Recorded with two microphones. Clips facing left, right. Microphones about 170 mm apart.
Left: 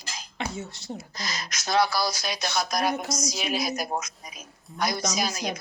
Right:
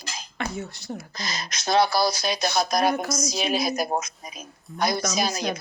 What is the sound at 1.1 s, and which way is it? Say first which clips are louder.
A woman's voice: right 2 dB; 25° right (ahead or behind).